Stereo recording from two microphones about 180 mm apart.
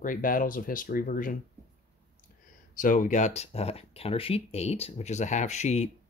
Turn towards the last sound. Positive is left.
turn(degrees=40)  # may be behind; listen again after turning